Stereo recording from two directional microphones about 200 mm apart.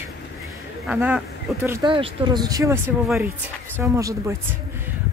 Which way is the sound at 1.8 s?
25° right (ahead or behind).